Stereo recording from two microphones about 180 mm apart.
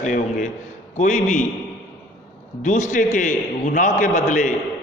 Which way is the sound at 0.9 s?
40° left (ahead or behind).